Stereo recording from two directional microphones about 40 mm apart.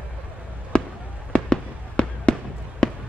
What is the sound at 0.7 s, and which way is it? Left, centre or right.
Fireworks, left.